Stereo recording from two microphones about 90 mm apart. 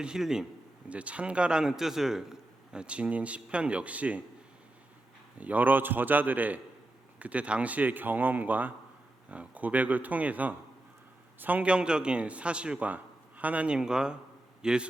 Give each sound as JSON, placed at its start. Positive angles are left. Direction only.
{"t": 0.0, "sound": "speech", "side_deg": -5}
{"t": 5.4, "sound": "a man's voice", "side_deg": -15}